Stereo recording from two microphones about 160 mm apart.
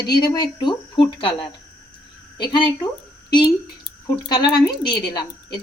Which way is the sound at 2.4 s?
30° left (ahead or behind).